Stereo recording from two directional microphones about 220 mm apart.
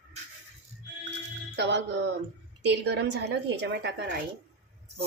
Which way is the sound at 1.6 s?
50° right (ahead or behind).